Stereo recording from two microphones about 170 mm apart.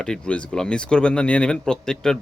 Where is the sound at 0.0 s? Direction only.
5° left (ahead or behind).